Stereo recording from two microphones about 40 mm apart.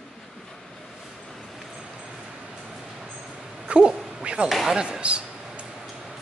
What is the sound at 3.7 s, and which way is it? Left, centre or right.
Quack, right.